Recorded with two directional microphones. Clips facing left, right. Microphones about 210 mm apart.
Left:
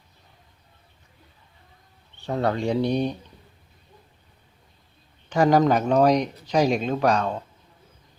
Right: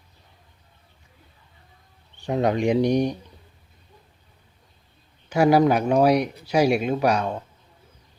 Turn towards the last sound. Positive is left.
turn(degrees=-10)  # may be behind; listen again after turning